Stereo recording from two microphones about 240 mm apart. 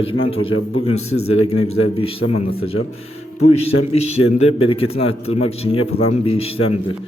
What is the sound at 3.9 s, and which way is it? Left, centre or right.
A man's voice, left.